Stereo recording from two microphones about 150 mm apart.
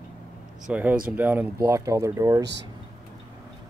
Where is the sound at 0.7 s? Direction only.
10° right (ahead or behind).